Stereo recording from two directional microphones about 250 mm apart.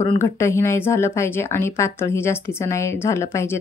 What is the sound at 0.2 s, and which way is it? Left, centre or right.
A woman's voice, centre.